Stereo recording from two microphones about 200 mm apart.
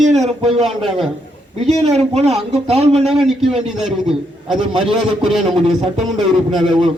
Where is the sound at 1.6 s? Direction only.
30° right (ahead or behind).